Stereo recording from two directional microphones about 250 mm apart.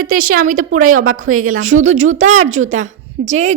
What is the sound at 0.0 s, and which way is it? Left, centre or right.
A woman's voice, right.